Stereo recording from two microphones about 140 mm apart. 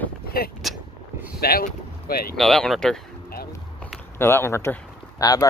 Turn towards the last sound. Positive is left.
turn(degrees=25)  # may be behind; listen again after turning